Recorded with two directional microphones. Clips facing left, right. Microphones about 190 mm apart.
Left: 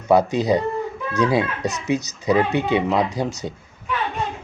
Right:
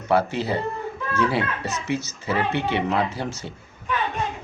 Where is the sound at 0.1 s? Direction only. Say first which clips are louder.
Left 5 dB; 15° left (ahead or behind).